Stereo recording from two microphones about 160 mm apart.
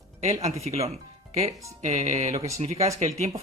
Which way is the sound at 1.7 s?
40° right (ahead or behind).